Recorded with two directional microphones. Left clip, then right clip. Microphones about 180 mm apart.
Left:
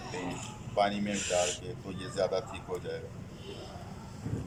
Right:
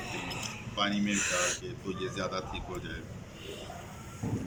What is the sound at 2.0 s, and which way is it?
Speech, 20° left (ahead or behind).